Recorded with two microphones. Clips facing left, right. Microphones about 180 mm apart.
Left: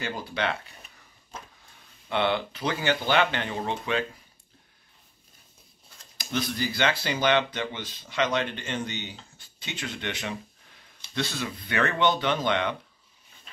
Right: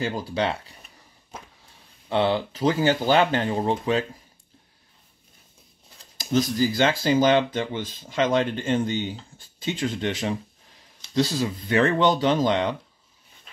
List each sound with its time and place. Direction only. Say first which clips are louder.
0.0 s speech: right 5 dB; 35° right (ahead or behind)
2.0 s speech: right 4 dB; 35° right (ahead or behind)
6.1 s speech: right 7 dB; 40° right (ahead or behind)